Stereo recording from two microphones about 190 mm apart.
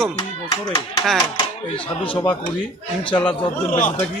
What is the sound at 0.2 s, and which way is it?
Speech, 20° left (ahead or behind).